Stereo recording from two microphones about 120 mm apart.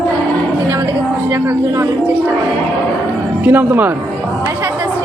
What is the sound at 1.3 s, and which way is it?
A woman's voice, 20° right (ahead or behind).